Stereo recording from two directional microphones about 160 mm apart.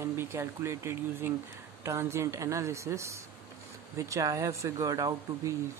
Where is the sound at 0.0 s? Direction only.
15° right (ahead or behind).